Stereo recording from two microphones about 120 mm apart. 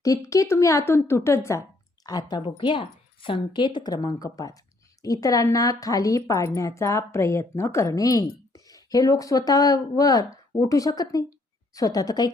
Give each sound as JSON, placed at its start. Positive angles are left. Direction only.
{"t": 0.0, "sound": "a woman's voice", "side_deg": 30}
{"t": 2.4, "sound": "a woman's voice", "side_deg": 45}